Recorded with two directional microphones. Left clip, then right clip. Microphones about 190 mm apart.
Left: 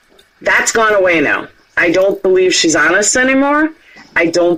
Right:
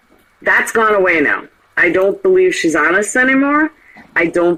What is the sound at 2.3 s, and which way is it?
Speech, 45° left (ahead or behind).